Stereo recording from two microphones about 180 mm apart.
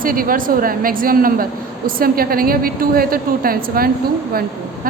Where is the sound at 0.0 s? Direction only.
50° right (ahead or behind).